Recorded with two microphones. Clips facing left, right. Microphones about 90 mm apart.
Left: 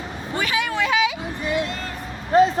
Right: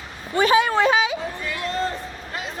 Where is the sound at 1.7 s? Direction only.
30° right (ahead or behind).